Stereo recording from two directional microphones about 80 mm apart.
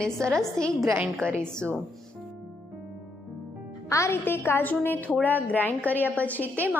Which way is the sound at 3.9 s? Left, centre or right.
Left.